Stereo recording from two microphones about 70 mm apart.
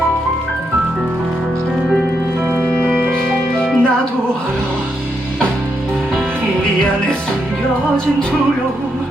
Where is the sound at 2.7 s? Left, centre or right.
Centre.